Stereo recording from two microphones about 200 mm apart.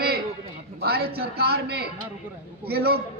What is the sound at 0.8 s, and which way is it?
A man's voice, 50° right (ahead or behind).